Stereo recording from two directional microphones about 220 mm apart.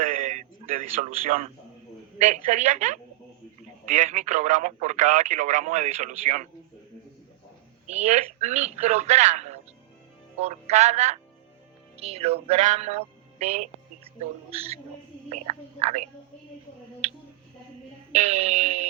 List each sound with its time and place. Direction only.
0.0 s a sound: 35° right (ahead or behind)
2.1 s speech: 30° right (ahead or behind)
7.9 s speech: 30° right (ahead or behind)
11.9 s music: 25° right (ahead or behind)
15.3 s speech: 30° right (ahead or behind)
18.1 s music: 30° right (ahead or behind)